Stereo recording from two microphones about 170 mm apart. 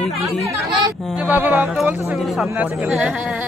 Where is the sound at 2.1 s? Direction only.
Centre (ahead or behind).